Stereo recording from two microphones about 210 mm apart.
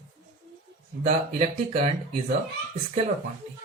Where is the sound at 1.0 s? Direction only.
30° right (ahead or behind).